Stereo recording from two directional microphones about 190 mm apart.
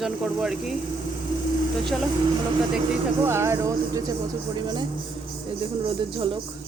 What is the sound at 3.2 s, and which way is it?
Speech, 15° right (ahead or behind).